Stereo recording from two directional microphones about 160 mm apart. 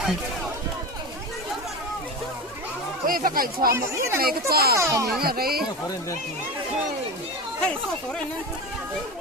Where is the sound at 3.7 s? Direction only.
15° right (ahead or behind).